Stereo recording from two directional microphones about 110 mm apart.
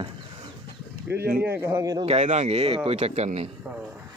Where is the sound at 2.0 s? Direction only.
80° right.